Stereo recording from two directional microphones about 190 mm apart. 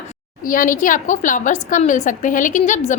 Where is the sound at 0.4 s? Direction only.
45° left (ahead or behind).